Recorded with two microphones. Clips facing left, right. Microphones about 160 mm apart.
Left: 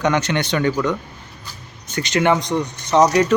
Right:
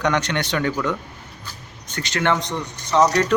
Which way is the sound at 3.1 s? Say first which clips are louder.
Left 3 dB; 10° left (ahead or behind).